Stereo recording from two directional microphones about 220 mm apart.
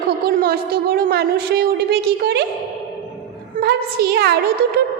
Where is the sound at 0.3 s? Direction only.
45° right (ahead or behind).